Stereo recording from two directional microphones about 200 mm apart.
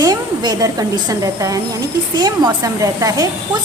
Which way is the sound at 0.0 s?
20° right (ahead or behind).